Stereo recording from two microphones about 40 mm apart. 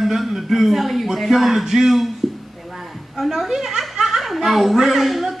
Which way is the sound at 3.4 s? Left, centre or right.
Centre.